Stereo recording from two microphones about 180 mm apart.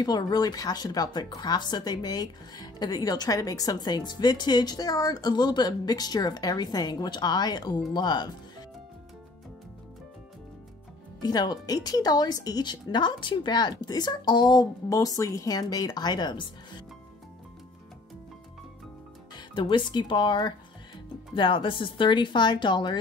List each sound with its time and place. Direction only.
0.0 s speech: 20° left (ahead or behind)
11.2 s speech: 20° left (ahead or behind)
19.3 s speech: 25° left (ahead or behind)